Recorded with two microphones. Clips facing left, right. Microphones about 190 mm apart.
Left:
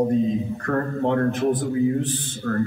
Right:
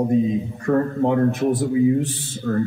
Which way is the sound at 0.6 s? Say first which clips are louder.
Right 5 dB; 10° right (ahead or behind).